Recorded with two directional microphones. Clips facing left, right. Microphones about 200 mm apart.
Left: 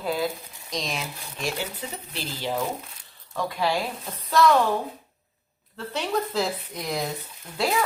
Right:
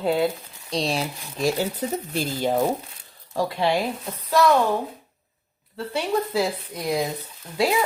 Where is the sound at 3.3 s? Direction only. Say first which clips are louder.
Right 3 dB; 30° right (ahead or behind).